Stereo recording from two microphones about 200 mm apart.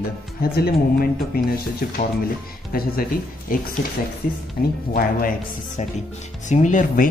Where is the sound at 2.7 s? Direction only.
45° left (ahead or behind).